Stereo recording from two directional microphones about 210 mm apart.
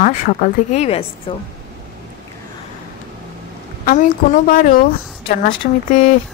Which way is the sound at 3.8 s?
40° left (ahead or behind).